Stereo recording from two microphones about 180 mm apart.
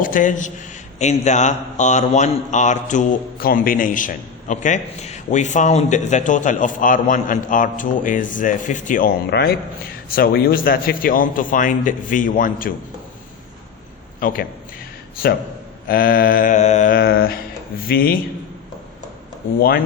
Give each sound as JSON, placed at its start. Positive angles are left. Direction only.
{"t": 0.0, "sound": "a man's voice", "side_deg": 45}
{"t": 14.2, "sound": "a man's voice", "side_deg": 50}
{"t": 15.9, "sound": "a man's voice", "side_deg": 50}
{"t": 19.5, "sound": "a man's voice", "side_deg": 55}